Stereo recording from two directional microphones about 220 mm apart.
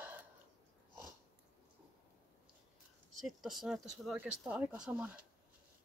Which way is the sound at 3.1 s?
Centre (ahead or behind).